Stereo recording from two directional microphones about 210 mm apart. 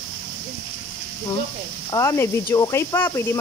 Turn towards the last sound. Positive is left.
turn(degrees=10)  # may be behind; listen again after turning